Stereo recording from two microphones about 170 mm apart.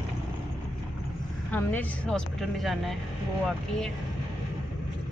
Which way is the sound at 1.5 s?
10° left (ahead or behind).